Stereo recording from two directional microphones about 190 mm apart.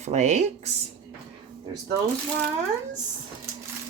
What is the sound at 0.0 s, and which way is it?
Speech, 35° right (ahead or behind).